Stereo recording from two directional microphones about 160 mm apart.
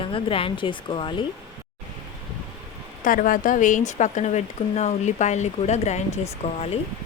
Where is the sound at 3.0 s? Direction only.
60° left (ahead or behind); by 6.6 s 40° left (ahead or behind).